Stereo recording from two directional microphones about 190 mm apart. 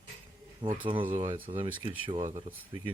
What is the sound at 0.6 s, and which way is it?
Speech, 25° right (ahead or behind).